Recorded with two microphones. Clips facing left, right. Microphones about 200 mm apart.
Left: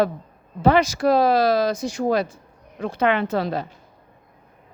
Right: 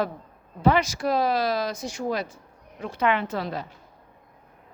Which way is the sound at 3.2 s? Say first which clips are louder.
Left 6 dB; 30° left (ahead or behind).